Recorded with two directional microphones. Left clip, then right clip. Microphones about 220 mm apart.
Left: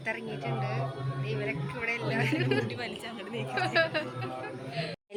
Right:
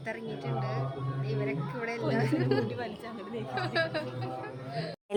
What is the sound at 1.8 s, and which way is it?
Speech, 20° right (ahead or behind).